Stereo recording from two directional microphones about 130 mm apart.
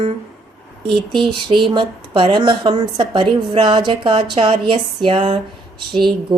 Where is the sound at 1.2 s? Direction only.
40° right (ahead or behind).